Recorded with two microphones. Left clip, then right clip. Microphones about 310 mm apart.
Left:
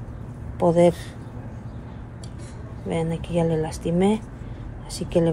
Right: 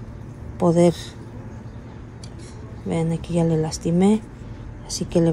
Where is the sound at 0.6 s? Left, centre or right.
Right.